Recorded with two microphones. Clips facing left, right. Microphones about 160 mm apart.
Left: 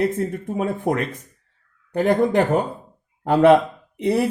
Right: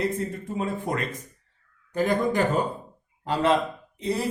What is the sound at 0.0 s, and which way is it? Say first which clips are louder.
Speech: left 6 dB; 65° left (ahead or behind).